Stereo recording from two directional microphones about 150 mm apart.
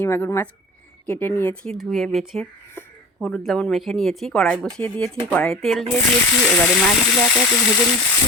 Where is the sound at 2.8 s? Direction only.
15° left (ahead or behind).